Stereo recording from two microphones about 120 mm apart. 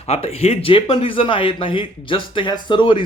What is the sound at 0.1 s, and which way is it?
A man's voice, 60° left (ahead or behind).